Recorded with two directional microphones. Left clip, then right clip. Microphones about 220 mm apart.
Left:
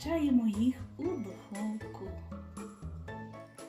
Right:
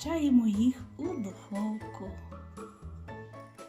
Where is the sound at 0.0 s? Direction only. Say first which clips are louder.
Right 3 dB; 30° right (ahead or behind).